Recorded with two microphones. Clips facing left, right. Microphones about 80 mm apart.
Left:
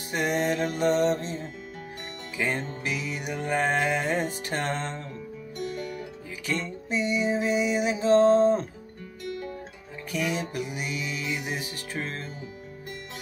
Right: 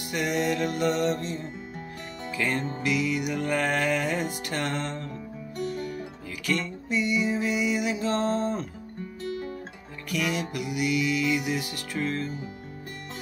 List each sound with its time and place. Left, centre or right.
0.1 s music: left
6.4 s music: left
10.1 s music: left